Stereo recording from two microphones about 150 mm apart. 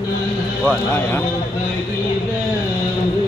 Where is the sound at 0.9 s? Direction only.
15° left (ahead or behind).